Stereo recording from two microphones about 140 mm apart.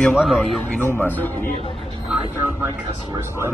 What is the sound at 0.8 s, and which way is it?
Speech, 15° left (ahead or behind).